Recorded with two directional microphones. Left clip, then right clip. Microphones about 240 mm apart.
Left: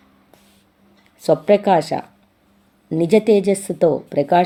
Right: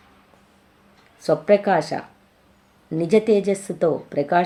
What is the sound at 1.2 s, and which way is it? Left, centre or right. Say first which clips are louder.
Speech: left 3 dB; left.